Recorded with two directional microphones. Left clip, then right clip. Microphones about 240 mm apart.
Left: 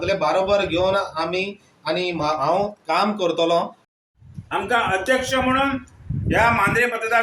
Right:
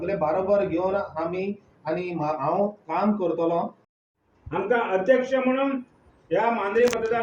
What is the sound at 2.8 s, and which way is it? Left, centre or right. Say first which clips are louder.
Speech: left 5 dB; centre.